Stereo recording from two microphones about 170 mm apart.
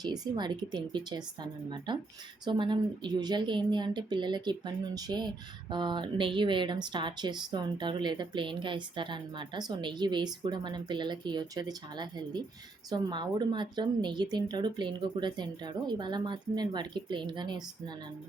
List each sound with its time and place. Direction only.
0.0 s speech: 25° right (ahead or behind)